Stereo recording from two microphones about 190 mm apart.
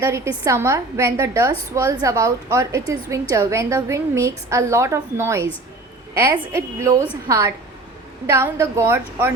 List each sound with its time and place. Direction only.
0.0 s a woman's voice: 15° right (ahead or behind)